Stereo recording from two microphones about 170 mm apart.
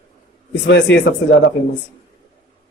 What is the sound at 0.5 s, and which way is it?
Speech, 90° left.